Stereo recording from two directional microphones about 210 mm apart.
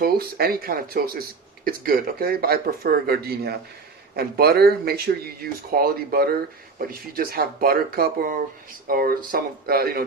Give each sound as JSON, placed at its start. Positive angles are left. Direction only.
{"t": 0.0, "sound": "speech", "side_deg": -45}